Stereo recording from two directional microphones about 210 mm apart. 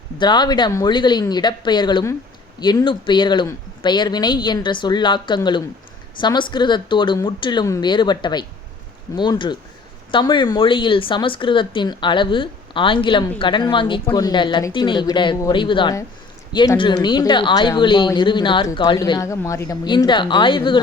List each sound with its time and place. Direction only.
0.2 s speech: 20° left (ahead or behind)